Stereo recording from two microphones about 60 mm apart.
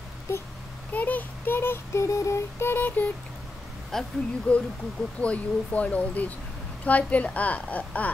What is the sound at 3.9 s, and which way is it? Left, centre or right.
Speech, centre.